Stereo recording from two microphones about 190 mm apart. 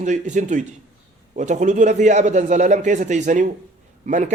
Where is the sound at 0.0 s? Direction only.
40° right (ahead or behind).